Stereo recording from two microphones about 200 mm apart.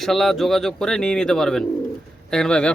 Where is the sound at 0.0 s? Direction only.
Centre (ahead or behind).